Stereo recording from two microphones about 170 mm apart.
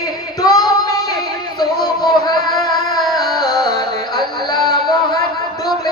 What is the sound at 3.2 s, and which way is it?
Music, 25° left (ahead or behind).